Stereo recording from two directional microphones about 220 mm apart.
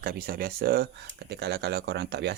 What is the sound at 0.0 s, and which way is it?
Speech, 40° right (ahead or behind).